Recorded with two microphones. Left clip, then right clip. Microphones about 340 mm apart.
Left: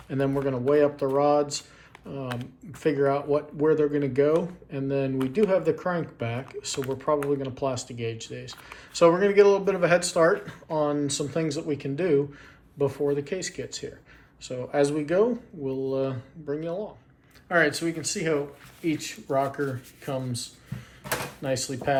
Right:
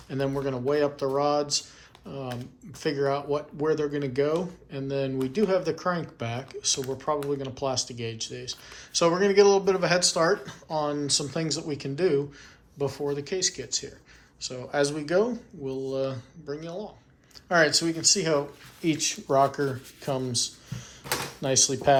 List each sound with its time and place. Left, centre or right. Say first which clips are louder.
0.1 s speech: left 2 dB; centre
17.5 s speech: right 1 dB; centre